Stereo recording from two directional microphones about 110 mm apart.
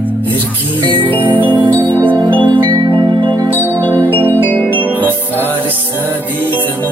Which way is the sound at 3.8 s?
15° left (ahead or behind).